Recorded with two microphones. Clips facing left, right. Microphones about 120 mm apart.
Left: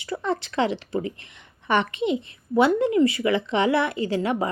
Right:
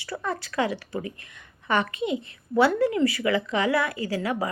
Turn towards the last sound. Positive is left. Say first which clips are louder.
# left 3 dB
turn(degrees=25)  # may be behind; listen again after turning